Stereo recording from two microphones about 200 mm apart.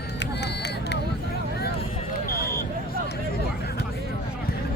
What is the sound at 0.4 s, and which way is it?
Vehicle, 55° left (ahead or behind).